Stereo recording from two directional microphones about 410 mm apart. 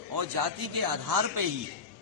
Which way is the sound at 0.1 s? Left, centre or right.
Right.